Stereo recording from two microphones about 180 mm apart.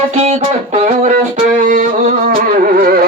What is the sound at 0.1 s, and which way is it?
Music, 35° right (ahead or behind).